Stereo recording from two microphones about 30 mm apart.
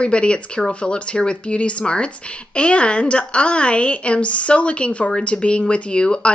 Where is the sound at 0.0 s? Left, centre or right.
Left.